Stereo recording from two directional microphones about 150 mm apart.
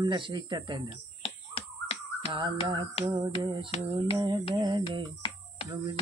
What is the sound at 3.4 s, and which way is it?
Speech, 30° right (ahead or behind).